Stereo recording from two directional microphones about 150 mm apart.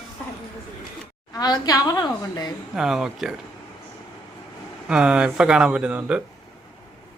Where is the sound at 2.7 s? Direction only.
5° right (ahead or behind).